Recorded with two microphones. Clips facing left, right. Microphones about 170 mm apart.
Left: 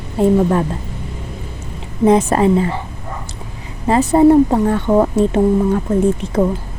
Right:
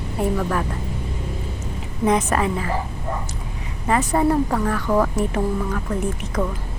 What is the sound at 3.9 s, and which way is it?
A woman's voice, 30° left (ahead or behind).